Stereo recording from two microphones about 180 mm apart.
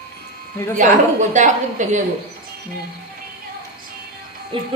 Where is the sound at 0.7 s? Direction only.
45° right (ahead or behind).